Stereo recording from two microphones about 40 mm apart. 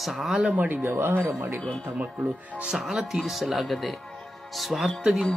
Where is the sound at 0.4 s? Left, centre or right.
Right.